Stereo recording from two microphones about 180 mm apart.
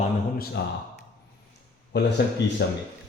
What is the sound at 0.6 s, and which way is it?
Speech, 65° left (ahead or behind).